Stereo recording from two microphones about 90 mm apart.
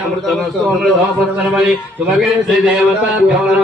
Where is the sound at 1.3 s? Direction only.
5° right (ahead or behind).